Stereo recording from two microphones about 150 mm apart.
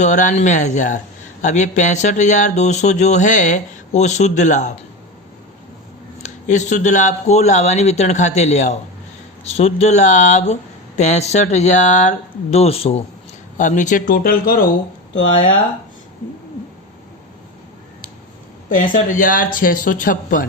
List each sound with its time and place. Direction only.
0.0 s a man's voice: 55° left (ahead or behind)
6.2 s a man's voice: 50° left (ahead or behind)
13.6 s speech: 55° left (ahead or behind); by 14.7 s 75° left (ahead or behind)
18.8 s speech: 65° left (ahead or behind)